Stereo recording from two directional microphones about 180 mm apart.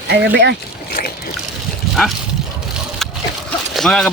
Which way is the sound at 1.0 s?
50° left (ahead or behind).